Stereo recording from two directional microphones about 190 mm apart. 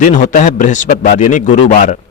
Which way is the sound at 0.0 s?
40° left (ahead or behind).